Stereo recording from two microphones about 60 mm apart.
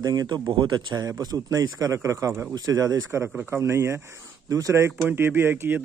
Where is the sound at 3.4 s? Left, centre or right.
Right.